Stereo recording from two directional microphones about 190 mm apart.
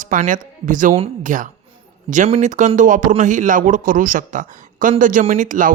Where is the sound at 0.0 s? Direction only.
45° right (ahead or behind).